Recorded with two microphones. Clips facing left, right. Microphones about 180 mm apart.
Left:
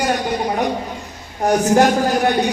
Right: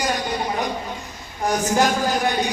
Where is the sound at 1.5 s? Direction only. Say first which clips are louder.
Left 6 dB; 60° left (ahead or behind).